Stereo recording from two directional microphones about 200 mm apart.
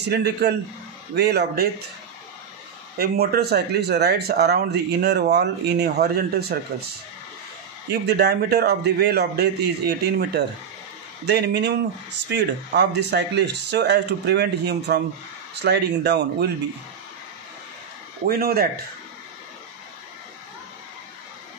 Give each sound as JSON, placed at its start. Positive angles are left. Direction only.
{"t": 0.1, "sound": "speech", "side_deg": -55}
{"t": 3.0, "sound": "speech", "side_deg": -50}
{"t": 7.9, "sound": "speech", "side_deg": -55}
{"t": 18.2, "sound": "speech", "side_deg": -50}